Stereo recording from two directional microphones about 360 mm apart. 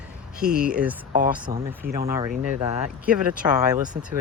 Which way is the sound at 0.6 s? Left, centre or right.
Centre.